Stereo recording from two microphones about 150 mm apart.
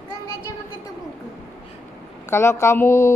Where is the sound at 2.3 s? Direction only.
15° left (ahead or behind).